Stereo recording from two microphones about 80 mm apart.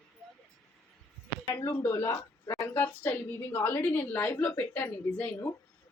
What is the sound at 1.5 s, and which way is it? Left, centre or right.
Speech, left.